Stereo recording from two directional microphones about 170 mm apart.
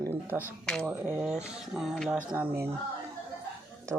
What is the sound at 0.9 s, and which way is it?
Speech, 10° right (ahead or behind).